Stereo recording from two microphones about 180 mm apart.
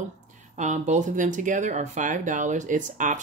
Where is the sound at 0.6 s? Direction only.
40° right (ahead or behind).